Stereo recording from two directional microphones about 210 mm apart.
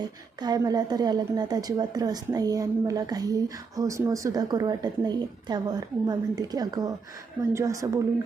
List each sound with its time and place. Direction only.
0.3 s a woman's voice: 20° right (ahead or behind)